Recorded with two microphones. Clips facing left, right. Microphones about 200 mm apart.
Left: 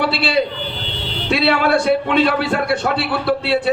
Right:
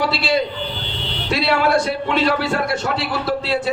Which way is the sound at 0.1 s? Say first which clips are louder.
Left 1 dB; 60° left (ahead or behind).